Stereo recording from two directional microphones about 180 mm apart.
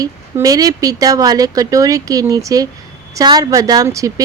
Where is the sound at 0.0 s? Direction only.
20° right (ahead or behind).